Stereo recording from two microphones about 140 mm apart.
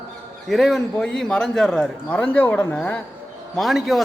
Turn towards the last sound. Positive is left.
turn(degrees=0)  # may be behind; listen again after turning